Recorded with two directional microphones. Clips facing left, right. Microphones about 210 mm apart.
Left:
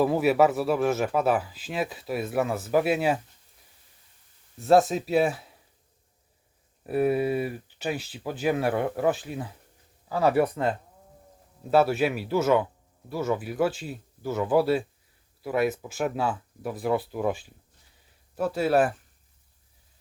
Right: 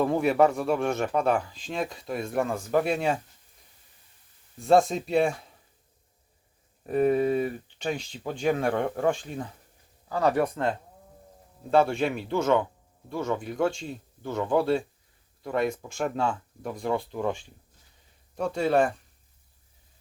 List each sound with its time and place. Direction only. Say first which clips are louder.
0.0 s a man's voice: left 1 dB; 5° left (ahead or behind)
4.6 s a man's voice: left 1 dB; centre (ahead or behind)
6.8 s a man's voice: right 1 dB; 5° left (ahead or behind)